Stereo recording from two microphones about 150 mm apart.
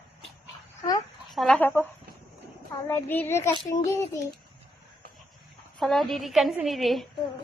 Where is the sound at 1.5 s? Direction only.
15° left (ahead or behind).